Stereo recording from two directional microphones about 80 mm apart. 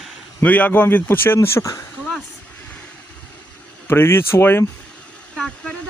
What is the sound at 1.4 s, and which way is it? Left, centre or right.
Speech, left.